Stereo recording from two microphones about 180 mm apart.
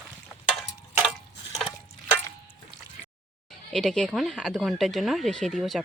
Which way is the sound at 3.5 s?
Centre (ahead or behind).